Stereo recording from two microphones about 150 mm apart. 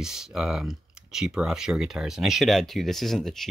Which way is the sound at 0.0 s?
5° right (ahead or behind).